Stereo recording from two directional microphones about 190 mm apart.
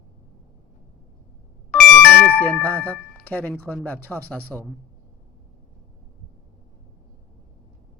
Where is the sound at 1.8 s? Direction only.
10° left (ahead or behind).